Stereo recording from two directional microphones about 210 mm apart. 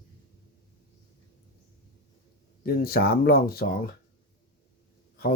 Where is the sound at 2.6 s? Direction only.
45° left (ahead or behind).